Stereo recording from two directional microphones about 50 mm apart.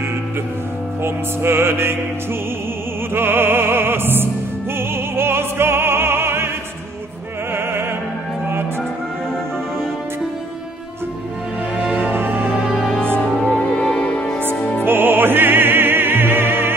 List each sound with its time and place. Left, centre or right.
1.0 s music: right
3.2 s music: right
4.7 s opera: right
11.7 s music: right
13.0 s music: left
14.9 s opera: right